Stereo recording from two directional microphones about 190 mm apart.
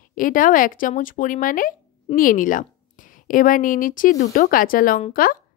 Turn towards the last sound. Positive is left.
turn(degrees=45)  # may be behind; listen again after turning